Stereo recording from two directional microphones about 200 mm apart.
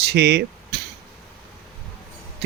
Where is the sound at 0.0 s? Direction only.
55° right (ahead or behind).